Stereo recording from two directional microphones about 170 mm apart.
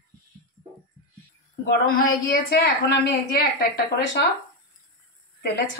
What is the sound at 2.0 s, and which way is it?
A woman's voice, 60° left (ahead or behind).